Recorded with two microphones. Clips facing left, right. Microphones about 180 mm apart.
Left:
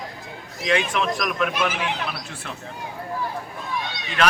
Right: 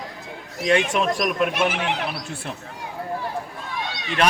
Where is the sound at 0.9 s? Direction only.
40° right (ahead or behind).